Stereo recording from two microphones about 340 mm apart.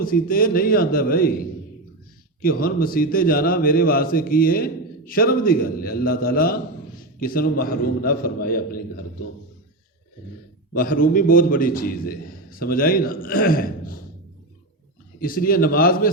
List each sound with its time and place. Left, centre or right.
0.0 s a man's voice: left
10.8 s a man's voice: left
15.2 s a man's voice: left